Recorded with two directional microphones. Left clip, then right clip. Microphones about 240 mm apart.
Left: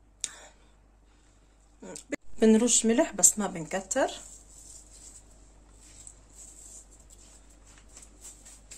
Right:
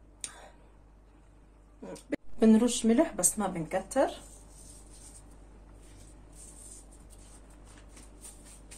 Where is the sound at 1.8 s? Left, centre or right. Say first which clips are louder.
Even; left.